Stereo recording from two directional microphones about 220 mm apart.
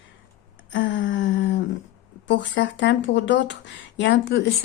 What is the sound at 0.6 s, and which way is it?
Speech, 55° left (ahead or behind).